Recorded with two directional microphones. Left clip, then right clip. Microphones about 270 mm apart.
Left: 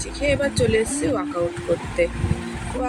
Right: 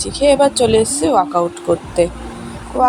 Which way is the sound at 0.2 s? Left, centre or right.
Right.